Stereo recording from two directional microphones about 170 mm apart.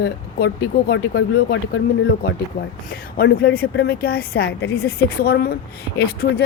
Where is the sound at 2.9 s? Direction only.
70° left (ahead or behind).